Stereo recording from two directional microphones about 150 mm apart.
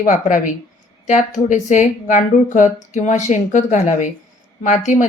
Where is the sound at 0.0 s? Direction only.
60° left (ahead or behind).